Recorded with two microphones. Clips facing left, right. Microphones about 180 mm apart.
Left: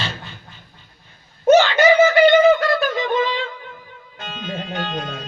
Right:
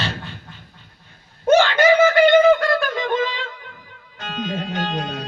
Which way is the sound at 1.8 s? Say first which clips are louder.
Even; 55° right (ahead or behind).